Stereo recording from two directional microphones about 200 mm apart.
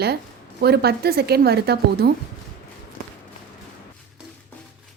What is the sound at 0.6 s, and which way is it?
A woman's voice, 55° right (ahead or behind).